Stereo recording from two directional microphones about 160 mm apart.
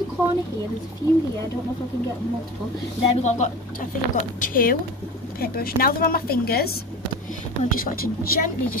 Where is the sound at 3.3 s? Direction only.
50° left (ahead or behind).